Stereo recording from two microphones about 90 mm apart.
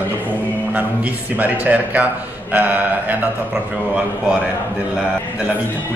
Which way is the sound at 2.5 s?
20° right (ahead or behind).